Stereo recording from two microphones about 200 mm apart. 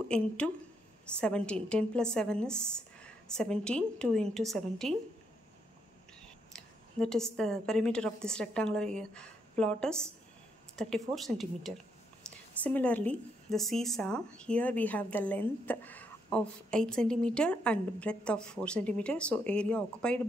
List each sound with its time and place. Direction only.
0.4 s a woman's voice: 5° left (ahead or behind)
6.5 s a woman's voice: 5° left (ahead or behind)